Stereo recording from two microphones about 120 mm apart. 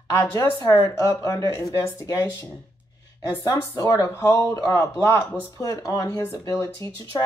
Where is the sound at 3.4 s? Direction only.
30° left (ahead or behind).